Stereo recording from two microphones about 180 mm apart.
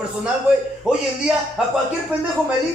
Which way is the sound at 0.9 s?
5° right (ahead or behind).